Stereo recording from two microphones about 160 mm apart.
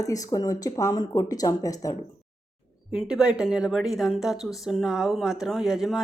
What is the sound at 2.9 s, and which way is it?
A woman's voice, 5° right (ahead or behind).